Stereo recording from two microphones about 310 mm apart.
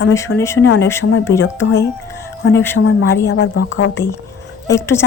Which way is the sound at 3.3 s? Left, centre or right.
Left.